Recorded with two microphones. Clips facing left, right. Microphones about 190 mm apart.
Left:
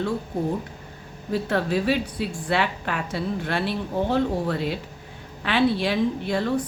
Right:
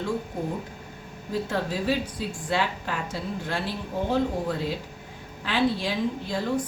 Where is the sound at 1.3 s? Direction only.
65° left (ahead or behind).